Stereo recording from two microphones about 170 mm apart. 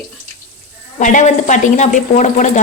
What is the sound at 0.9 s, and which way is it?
Speech, 45° left (ahead or behind).